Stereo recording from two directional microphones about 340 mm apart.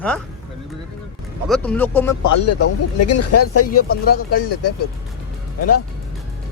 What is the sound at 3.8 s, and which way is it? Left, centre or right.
Speech, left.